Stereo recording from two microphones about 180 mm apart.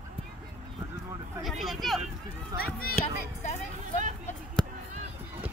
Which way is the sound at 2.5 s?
55° left (ahead or behind).